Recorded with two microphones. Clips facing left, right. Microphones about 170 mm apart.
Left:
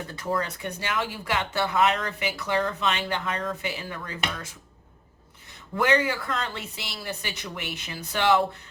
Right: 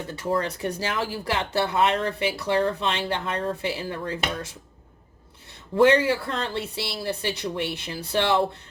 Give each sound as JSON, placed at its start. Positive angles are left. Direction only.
{"t": 0.3, "sound": "speech", "side_deg": -35}
{"t": 5.7, "sound": "speech", "side_deg": -30}